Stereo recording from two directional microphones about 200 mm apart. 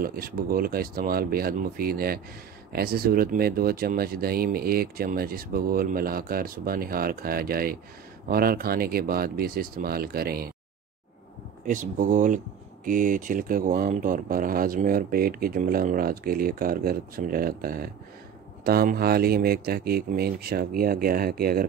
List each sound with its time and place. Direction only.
0.0 s speech: 45° right (ahead or behind)
11.6 s speech: 40° right (ahead or behind)